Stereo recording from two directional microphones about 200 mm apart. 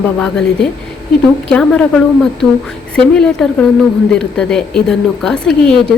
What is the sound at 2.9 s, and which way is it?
A woman's voice, 5° left (ahead or behind).